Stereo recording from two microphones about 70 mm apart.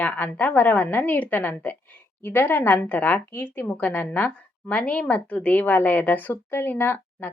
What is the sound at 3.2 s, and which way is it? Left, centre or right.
Speech, left.